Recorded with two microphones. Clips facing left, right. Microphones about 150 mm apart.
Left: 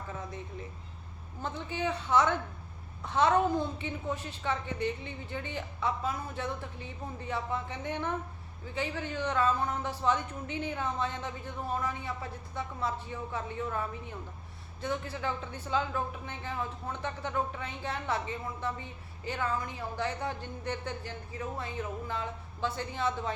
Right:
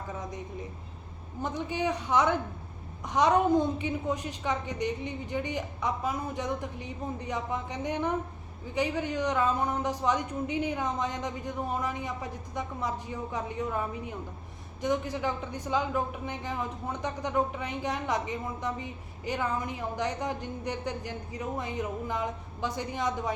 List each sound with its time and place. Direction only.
0.1 s speech: 15° right (ahead or behind)